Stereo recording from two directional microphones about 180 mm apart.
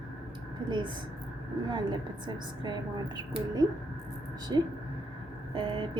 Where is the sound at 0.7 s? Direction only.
25° right (ahead or behind).